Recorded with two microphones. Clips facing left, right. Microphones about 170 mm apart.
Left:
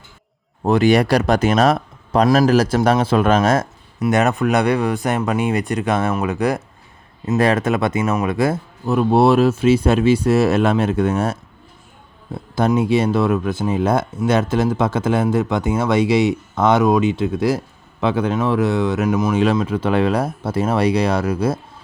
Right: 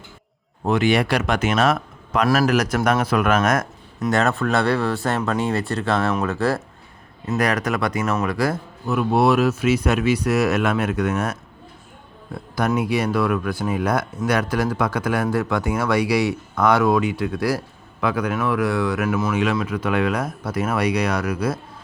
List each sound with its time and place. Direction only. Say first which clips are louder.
0.6 s speech: left 4 dB; 35° left (ahead or behind)
2.2 s speech: left 4 dB; 20° left (ahead or behind)
2.5 s speech: left 4 dB; 30° left (ahead or behind)
4.1 s speech: left 3 dB; 20° left (ahead or behind)
7.3 s speech: left 5 dB; 25° left (ahead or behind)
19.3 s speech: left 4 dB; 30° left (ahead or behind)